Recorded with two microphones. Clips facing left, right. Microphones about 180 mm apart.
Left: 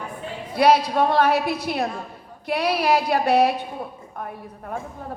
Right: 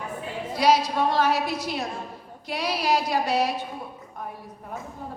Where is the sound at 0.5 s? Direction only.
60° left (ahead or behind).